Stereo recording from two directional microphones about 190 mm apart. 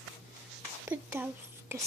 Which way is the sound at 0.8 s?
10° right (ahead or behind).